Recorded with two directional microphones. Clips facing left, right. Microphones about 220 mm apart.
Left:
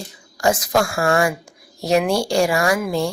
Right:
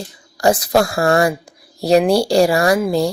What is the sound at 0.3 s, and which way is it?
A woman's voice, 35° right (ahead or behind).